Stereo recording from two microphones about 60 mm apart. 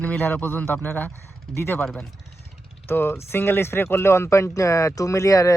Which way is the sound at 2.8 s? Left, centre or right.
Left.